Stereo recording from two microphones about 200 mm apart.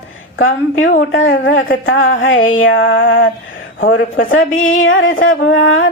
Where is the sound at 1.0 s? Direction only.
70° left (ahead or behind).